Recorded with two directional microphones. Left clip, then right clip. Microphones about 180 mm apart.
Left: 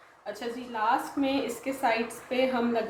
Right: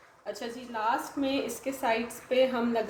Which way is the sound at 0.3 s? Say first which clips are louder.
Left 4 dB; 25° right (ahead or behind).